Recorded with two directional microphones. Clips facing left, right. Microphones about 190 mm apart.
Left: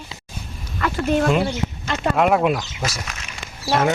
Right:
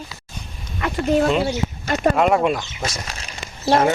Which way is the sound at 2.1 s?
Centre (ahead or behind).